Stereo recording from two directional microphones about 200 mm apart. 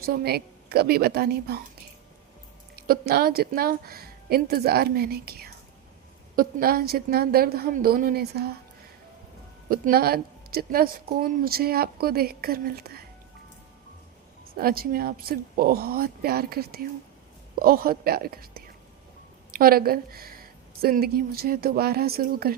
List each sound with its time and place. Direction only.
0.0 s a woman's voice: 50° right (ahead or behind)
2.7 s a woman's voice: 50° right (ahead or behind)
9.6 s a woman's voice: 45° right (ahead or behind)
14.5 s a woman's voice: 50° right (ahead or behind)